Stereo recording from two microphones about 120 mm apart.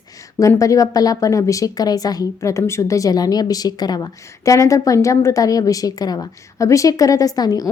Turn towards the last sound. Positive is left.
turn(degrees=30)  # may be behind; listen again after turning